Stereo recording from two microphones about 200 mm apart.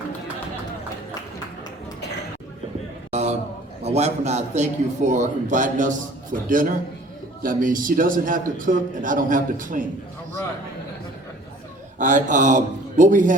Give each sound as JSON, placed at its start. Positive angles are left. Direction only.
{"t": 3.1, "sound": "a sound", "side_deg": -35}
{"t": 3.8, "sound": "a man's voice", "side_deg": -35}
{"t": 11.9, "sound": "a man's voice", "side_deg": -40}